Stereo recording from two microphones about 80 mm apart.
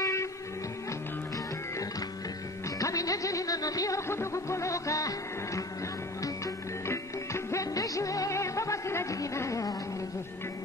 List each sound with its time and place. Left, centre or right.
0.0 s music: left
2.8 s music: left
4.1 s music: left